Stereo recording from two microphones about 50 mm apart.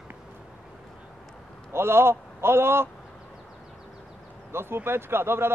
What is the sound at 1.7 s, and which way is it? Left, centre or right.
A man's voice, right.